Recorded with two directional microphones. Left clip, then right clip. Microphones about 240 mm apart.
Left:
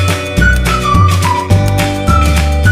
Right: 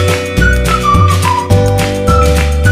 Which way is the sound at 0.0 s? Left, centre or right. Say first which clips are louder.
Right 1 dB; centre.